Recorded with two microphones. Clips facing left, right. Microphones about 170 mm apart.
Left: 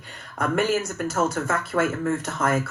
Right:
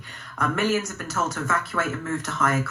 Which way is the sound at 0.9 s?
55° left (ahead or behind).